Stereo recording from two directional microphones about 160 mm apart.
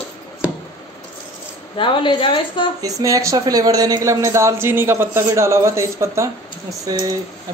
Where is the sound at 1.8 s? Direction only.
30° left (ahead or behind).